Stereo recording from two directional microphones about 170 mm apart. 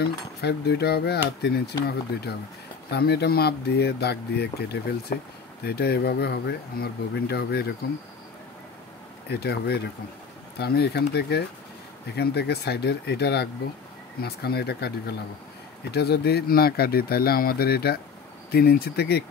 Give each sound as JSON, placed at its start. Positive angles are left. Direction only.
{"t": 0.4, "sound": "speech", "side_deg": 75}
{"t": 9.3, "sound": "speech", "side_deg": 75}